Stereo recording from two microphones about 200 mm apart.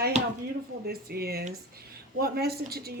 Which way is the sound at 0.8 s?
50° right (ahead or behind).